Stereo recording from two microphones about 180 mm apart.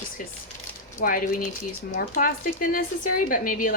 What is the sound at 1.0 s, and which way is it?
A woman's voice, 45° left (ahead or behind).